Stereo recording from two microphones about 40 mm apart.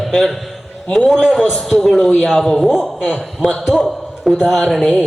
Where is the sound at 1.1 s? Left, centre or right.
Centre.